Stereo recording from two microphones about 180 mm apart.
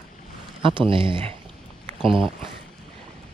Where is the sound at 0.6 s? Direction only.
30° right (ahead or behind).